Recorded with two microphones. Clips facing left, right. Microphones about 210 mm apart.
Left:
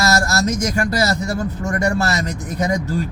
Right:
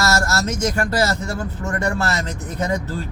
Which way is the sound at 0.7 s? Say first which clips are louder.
Left 1 dB; 10° left (ahead or behind).